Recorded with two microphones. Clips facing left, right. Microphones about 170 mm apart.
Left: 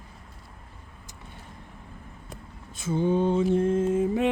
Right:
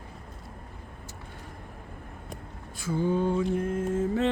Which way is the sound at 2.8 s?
20° left (ahead or behind).